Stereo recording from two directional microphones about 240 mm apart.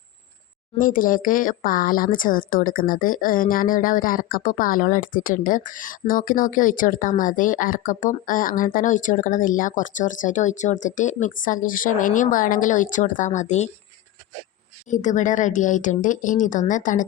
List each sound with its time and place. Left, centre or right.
0.8 s speech: left
14.8 s speech: left